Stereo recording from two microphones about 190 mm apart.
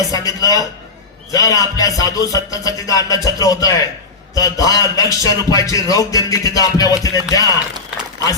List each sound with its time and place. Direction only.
0.1 s a man's voice: 20° left (ahead or behind)
1.3 s music: 20° left (ahead or behind)
3.2 s a man's voice: 20° left (ahead or behind)
4.4 s music: 20° left (ahead or behind)